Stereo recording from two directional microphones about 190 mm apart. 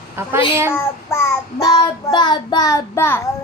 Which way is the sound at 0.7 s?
10° left (ahead or behind).